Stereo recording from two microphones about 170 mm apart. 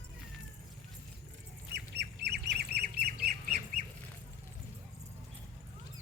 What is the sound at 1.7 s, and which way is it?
Squawk, 80° right.